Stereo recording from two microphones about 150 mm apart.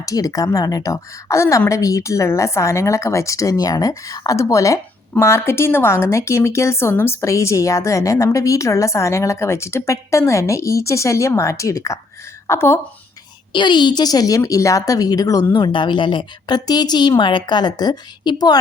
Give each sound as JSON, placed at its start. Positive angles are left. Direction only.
{"t": 0.0, "sound": "a woman's voice", "side_deg": 25}
{"t": 13.5, "sound": "a woman's voice", "side_deg": 30}